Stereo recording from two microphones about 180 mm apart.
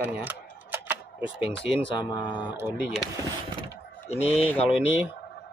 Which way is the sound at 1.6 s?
25° left (ahead or behind).